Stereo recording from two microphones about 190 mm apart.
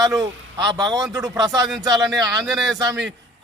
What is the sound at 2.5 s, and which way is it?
Speech, centre (ahead or behind).